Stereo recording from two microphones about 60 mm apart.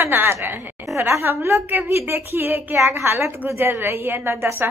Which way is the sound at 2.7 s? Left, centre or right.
Right.